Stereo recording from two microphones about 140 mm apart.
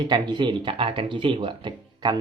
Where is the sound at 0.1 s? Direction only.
35° right (ahead or behind).